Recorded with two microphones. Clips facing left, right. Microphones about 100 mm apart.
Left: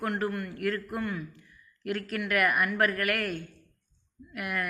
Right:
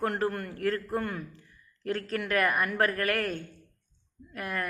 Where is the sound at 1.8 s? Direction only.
35° right (ahead or behind).